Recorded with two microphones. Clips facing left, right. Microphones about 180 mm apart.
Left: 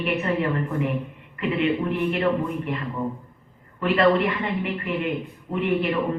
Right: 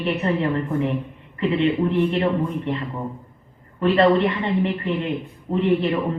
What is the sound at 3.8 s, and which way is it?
Speech, 30° right (ahead or behind).